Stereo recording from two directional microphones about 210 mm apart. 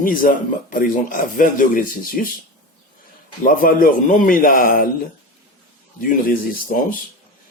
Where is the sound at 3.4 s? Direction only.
40° left (ahead or behind).